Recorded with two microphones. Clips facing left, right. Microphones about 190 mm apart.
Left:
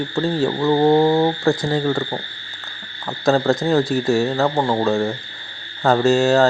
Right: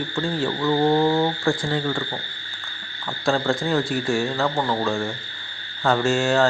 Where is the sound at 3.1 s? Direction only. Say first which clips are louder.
Left 5 dB; 40° left (ahead or behind).